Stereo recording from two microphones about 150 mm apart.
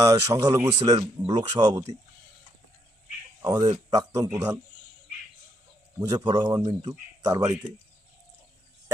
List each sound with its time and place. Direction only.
0.0 s speech: 20° right (ahead or behind)
3.4 s speech: 25° right (ahead or behind)
6.0 s speech: 20° right (ahead or behind)